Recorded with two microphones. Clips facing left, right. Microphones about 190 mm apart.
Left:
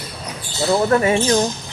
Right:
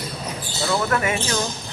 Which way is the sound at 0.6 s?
30° left (ahead or behind).